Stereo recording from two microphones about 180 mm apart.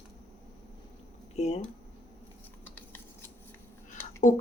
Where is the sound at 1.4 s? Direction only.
40° left (ahead or behind).